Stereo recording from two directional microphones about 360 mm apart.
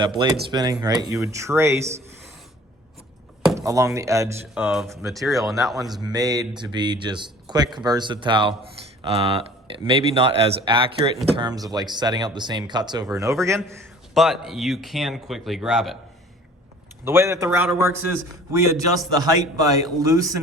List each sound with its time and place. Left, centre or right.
0.5 s a man's voice: centre
3.4 s speech: centre
6.0 s a man's voice: centre
17.1 s a man's voice: centre